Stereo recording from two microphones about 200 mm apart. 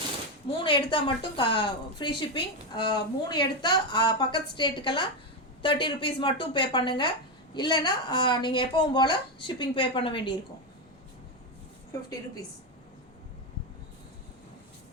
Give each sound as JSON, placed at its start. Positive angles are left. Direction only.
{"t": 0.4, "sound": "a woman's voice", "side_deg": 25}